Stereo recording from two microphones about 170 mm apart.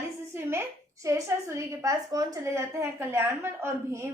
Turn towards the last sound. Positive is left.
turn(degrees=-15)  # may be behind; listen again after turning